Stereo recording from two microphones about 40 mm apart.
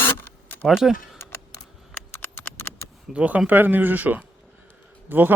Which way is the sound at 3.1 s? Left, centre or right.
Right.